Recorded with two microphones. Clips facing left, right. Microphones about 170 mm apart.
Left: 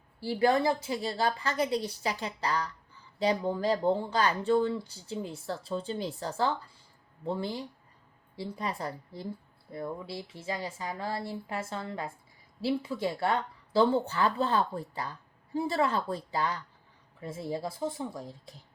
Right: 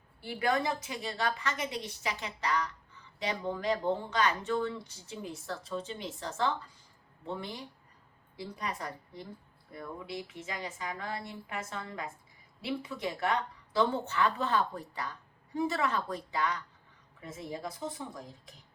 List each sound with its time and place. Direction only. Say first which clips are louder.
0.2 s speech: left 5 dB; 30° left (ahead or behind)